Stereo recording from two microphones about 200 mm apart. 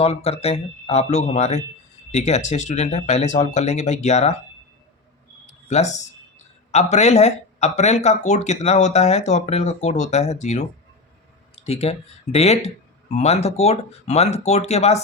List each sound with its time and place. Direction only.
0.0 s speech: 30° left (ahead or behind)
5.6 s speech: 35° left (ahead or behind)